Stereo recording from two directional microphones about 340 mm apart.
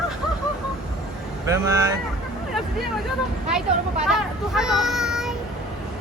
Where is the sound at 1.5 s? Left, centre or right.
Centre.